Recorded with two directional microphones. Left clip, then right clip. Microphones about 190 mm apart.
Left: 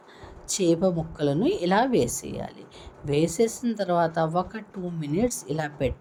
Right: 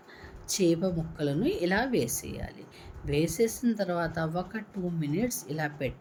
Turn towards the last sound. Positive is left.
turn(degrees=10)  # may be behind; listen again after turning